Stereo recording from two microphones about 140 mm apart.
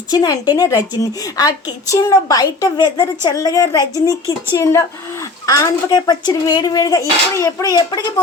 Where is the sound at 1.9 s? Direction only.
25° left (ahead or behind).